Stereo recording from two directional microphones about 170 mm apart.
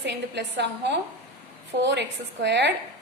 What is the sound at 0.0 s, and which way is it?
A woman's voice, 90° right.